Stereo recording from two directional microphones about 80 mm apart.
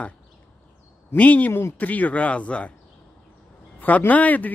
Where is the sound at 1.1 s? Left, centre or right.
Centre.